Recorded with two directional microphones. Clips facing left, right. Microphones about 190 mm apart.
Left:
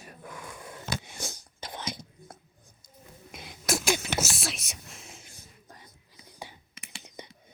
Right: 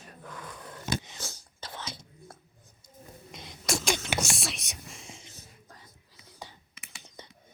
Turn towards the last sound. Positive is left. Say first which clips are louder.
# left 4 dB
turn(degrees=15)  # may be behind; listen again after turning